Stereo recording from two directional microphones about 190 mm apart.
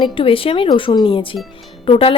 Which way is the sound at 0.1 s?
30° left (ahead or behind).